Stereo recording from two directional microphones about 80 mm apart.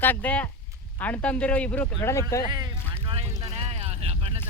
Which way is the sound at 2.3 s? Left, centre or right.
Left.